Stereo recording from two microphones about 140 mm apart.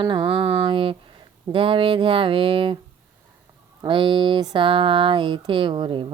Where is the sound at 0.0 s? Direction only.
35° right (ahead or behind).